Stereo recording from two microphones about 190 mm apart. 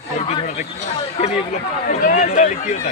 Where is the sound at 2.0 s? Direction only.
45° left (ahead or behind).